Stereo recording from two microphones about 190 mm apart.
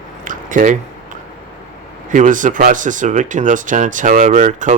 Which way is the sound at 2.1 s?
40° right (ahead or behind).